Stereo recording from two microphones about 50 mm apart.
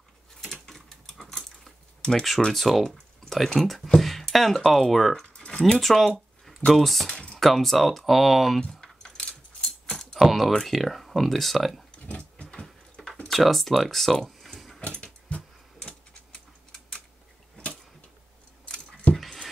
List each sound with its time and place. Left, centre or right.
0.4 s typewriter: centre
2.5 s speech: centre
5.4 s speech: centre
7.1 s typing: centre
7.3 s speech: centre
8.5 s keys jangling: centre
9.9 s typing: centre
10.5 s speech: centre
12.1 s a sound: left
13.3 s speech: centre
14.8 s mechanisms: left
15.2 s a sound: left
18.7 s keys jangling: left
19.1 s dog: centre